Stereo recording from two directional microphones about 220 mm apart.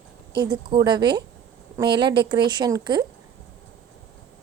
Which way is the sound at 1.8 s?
50° right (ahead or behind).